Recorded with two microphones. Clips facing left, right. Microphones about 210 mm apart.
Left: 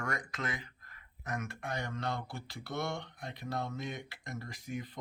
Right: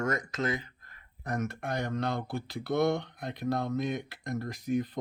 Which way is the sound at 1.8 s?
40° right (ahead or behind).